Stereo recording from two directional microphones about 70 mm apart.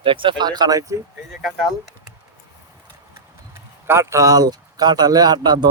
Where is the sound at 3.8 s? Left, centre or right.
Right.